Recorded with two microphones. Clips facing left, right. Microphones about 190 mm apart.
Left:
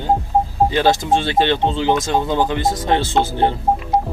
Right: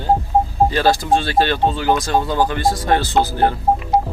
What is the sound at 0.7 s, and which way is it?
Speech, 20° left (ahead or behind).